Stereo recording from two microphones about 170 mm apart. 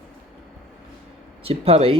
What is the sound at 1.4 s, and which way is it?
Speech, 35° right (ahead or behind).